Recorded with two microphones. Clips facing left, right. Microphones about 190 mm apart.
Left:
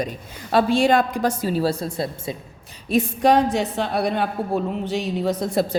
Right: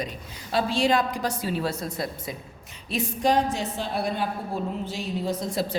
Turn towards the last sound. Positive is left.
turn(degrees=65)  # may be behind; listen again after turning